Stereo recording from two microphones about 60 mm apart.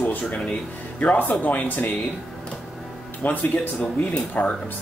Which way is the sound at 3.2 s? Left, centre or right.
Left.